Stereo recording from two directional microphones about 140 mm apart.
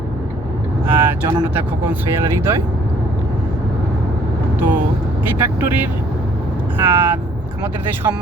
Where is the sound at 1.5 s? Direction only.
15° right (ahead or behind).